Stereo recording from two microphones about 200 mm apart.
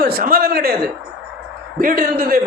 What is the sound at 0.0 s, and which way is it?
Speech, 45° right (ahead or behind).